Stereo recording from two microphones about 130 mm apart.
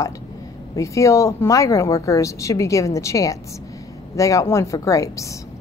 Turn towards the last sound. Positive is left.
turn(degrees=25)  # may be behind; listen again after turning